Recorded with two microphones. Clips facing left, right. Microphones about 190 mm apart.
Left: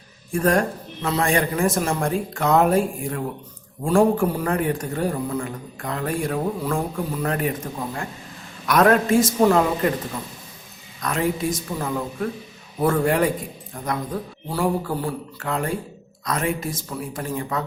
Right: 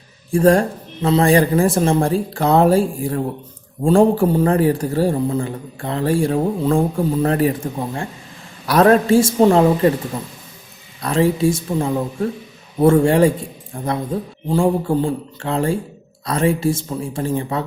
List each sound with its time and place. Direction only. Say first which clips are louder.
0.3 s a man's voice: right 6 dB; 30° right (ahead or behind)
8.6 s a man's voice: right 4 dB; 30° right (ahead or behind)
11.0 s a man's voice: right 7 dB; 30° right (ahead or behind)